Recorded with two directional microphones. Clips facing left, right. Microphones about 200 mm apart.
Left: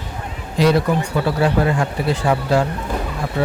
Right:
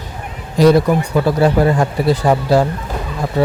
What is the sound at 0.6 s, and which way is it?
Speech, 40° right (ahead or behind).